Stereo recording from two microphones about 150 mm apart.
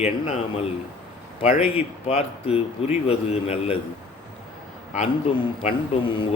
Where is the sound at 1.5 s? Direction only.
40° left (ahead or behind).